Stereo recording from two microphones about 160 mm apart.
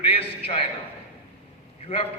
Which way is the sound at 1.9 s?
35° left (ahead or behind).